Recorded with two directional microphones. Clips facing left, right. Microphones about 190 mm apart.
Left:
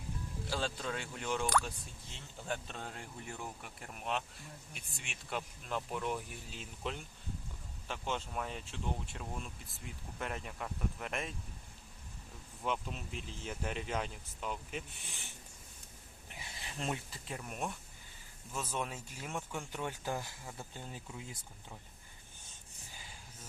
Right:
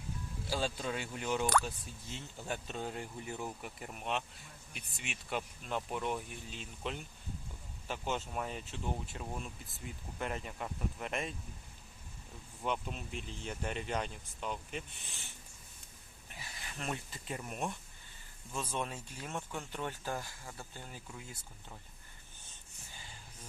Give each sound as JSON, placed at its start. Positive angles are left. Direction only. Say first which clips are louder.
{"t": 0.5, "sound": "speech", "louder": "right 2 dB", "side_deg": -10}
{"t": 2.5, "sound": "speech", "louder": "right 2 dB", "side_deg": -5}
{"t": 12.6, "sound": "speech", "louder": "right 1 dB", "side_deg": 0}
{"t": 16.3, "sound": "a sound", "louder": "left 1 dB", "side_deg": 25}
{"t": 16.9, "sound": "speech", "louder": "even", "side_deg": 0}